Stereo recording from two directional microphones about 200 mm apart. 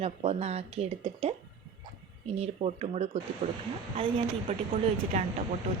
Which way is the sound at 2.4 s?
30° right (ahead or behind).